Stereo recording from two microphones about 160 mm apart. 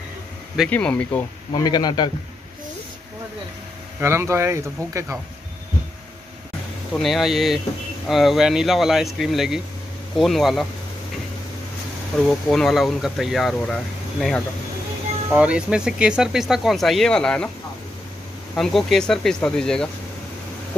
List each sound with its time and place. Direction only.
0.7 s speech: 10° left (ahead or behind)
1.5 s speech: 25° left (ahead or behind)
4.0 s speech: 15° right (ahead or behind)
6.9 s speech: centre (ahead or behind)
12.3 s speech: centre (ahead or behind)
15.3 s speech: 5° right (ahead or behind)
18.5 s speech: centre (ahead or behind)